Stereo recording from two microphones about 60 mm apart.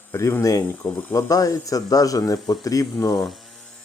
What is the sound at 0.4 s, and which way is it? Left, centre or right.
Speech, left.